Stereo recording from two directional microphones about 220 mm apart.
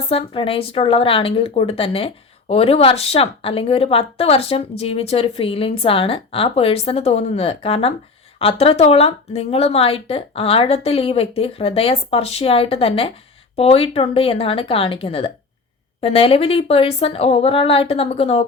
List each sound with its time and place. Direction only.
0.1 s speech: 25° left (ahead or behind)